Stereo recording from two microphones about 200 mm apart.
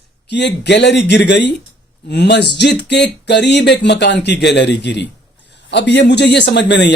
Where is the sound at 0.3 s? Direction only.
60° left (ahead or behind).